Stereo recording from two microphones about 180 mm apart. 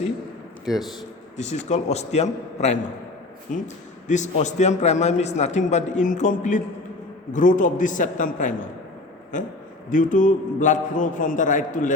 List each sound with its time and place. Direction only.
0.6 s a man's voice: centre (ahead or behind)
1.4 s a man's voice: 40° left (ahead or behind)
9.9 s a man's voice: 45° left (ahead or behind)